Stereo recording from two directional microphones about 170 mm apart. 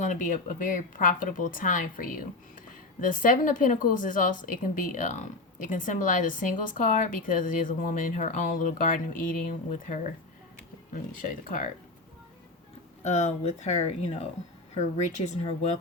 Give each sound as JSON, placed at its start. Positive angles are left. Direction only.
{"t": 0.0, "sound": "a woman's voice", "side_deg": 50}
{"t": 13.1, "sound": "speech", "side_deg": 40}